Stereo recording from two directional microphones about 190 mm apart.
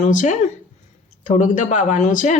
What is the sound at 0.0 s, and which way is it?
Speech, 40° left (ahead or behind).